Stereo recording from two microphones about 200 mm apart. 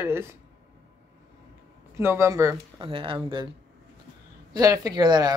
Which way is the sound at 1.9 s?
15° right (ahead or behind).